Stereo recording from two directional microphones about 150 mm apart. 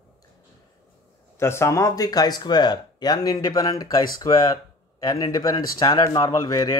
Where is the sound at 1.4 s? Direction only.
20° left (ahead or behind).